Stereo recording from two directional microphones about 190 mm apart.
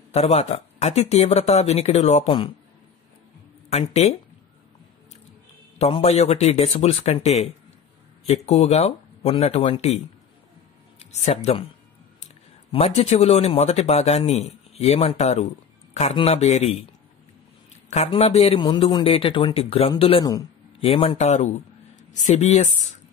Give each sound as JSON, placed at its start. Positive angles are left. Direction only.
{"t": 0.1, "sound": "speech", "side_deg": 35}
{"t": 3.7, "sound": "speech", "side_deg": 35}
{"t": 5.8, "sound": "speech", "side_deg": 30}
{"t": 11.1, "sound": "speech", "side_deg": 35}
{"t": 12.7, "sound": "speech", "side_deg": 35}
{"t": 17.8, "sound": "a man's voice", "side_deg": 35}